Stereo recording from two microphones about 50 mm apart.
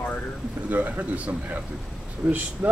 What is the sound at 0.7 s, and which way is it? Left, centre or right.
Speech, right.